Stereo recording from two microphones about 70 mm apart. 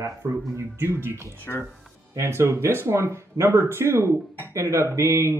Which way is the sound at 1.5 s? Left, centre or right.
Left.